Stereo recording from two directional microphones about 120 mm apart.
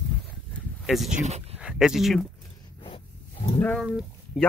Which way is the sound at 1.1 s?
80° right.